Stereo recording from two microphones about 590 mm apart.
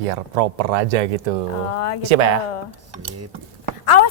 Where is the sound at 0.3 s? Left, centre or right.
Right.